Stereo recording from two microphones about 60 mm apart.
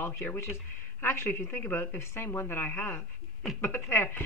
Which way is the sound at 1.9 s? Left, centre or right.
Left.